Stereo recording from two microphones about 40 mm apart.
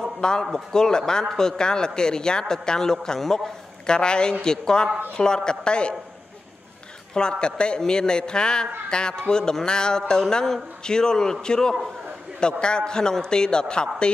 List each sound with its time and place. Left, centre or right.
0.4 s a man's voice: centre
3.8 s a man's voice: left
7.2 s a man's voice: left